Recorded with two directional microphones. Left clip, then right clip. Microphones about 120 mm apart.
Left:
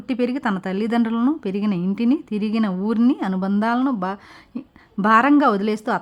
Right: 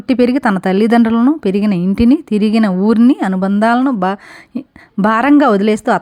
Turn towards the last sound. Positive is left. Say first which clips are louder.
# right 9 dB
turn(degrees=-40)  # may be behind; listen again after turning